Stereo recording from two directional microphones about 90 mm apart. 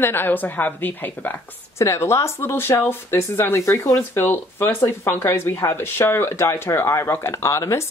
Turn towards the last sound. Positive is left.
turn(degrees=35)  # may be behind; listen again after turning